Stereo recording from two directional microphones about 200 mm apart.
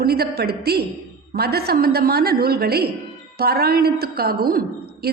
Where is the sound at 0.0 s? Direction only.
50° right (ahead or behind).